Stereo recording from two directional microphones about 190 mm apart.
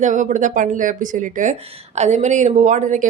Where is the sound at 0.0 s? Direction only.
40° right (ahead or behind).